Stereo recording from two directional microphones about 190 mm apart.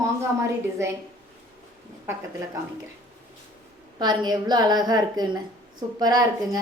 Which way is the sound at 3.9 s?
20° right (ahead or behind).